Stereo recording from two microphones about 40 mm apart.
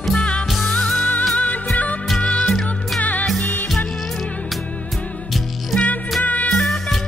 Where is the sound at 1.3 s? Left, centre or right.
Left.